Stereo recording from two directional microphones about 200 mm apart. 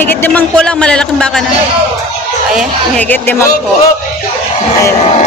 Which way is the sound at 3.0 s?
10° left (ahead or behind).